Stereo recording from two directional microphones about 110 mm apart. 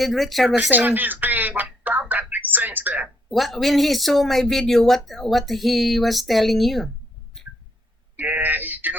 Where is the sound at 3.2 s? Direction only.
Centre (ahead or behind).